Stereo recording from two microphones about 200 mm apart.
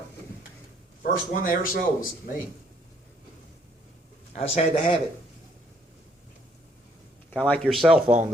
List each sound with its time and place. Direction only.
1.0 s speech: 45° left (ahead or behind)
4.3 s a man's voice: 30° left (ahead or behind)
7.3 s speech: 5° left (ahead or behind)